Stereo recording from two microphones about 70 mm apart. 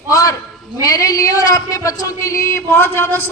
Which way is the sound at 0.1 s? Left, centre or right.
Left.